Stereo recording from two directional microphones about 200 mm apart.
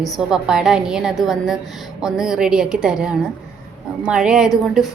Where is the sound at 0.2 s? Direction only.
5° right (ahead or behind).